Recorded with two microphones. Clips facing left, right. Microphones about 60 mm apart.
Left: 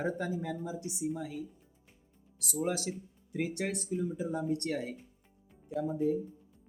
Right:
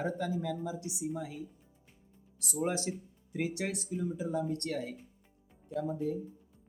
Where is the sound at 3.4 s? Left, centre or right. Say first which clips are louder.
Left 1 dB; centre.